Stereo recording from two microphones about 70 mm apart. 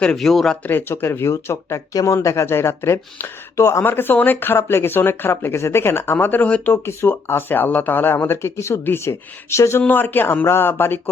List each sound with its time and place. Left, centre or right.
0.2 s speech: centre
0.6 s speech: left
9.8 s speech: left